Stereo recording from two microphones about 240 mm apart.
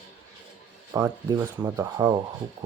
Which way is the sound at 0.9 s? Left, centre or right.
Centre.